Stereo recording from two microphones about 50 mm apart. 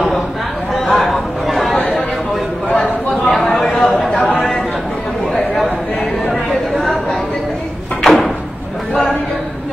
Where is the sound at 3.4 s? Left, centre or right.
Centre.